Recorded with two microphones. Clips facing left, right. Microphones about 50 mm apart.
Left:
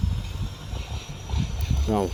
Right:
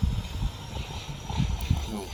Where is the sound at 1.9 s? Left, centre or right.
Left.